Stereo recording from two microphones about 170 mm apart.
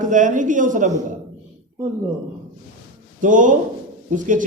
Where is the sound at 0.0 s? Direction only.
50° right (ahead or behind).